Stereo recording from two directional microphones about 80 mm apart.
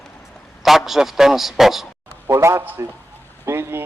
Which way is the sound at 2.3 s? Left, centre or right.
Right.